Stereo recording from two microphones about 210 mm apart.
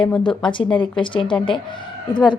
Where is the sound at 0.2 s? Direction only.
25° left (ahead or behind).